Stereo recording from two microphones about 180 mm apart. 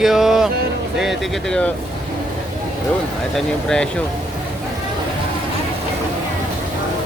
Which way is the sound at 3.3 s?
5° left (ahead or behind).